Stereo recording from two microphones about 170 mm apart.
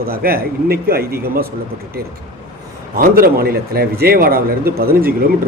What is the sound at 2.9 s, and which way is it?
A man's voice, 60° right (ahead or behind).